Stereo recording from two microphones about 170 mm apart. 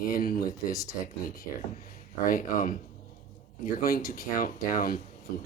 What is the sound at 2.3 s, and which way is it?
Speech, 55° left (ahead or behind).